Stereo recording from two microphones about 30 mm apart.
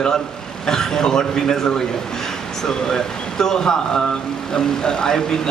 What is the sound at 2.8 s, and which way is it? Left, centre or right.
A man's voice, centre.